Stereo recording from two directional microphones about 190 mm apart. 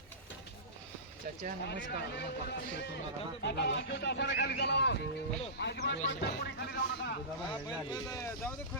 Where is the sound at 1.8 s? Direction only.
65° left (ahead or behind).